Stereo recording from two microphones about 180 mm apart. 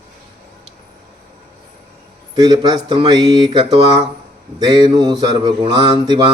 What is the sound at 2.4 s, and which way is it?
Mantra, 25° right (ahead or behind).